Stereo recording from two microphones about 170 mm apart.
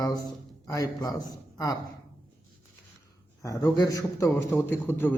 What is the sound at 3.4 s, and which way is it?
A man's voice, 20° left (ahead or behind).